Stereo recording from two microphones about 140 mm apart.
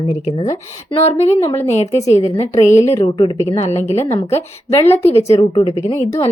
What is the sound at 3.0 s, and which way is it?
Speech, 35° left (ahead or behind).